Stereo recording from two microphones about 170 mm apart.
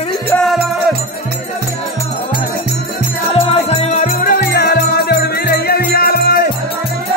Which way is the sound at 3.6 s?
40° left (ahead or behind).